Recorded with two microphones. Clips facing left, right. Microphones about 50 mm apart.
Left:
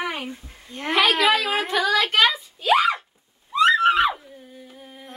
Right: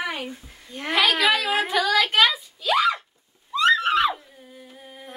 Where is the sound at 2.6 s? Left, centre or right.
Left.